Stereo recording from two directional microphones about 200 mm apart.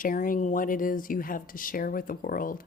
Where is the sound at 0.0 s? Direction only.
45° left (ahead or behind).